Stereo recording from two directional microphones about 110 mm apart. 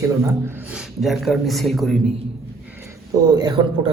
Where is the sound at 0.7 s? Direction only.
Centre (ahead or behind).